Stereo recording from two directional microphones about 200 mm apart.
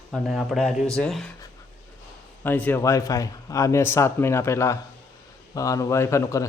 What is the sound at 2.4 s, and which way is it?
A man's voice, 10° left (ahead or behind).